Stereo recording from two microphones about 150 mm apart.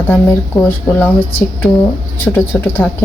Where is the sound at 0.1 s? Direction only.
20° left (ahead or behind).